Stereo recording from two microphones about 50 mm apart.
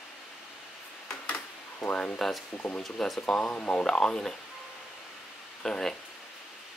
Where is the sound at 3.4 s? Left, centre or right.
Left.